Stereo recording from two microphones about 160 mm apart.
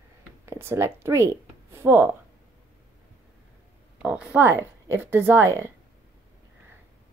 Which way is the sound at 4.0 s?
10° right (ahead or behind).